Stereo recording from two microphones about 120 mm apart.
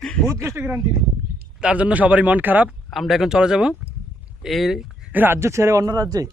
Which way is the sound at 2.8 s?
Centre (ahead or behind).